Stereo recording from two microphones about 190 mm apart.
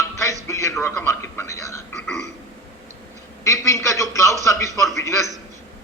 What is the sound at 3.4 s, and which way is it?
A man's voice, 15° left (ahead or behind).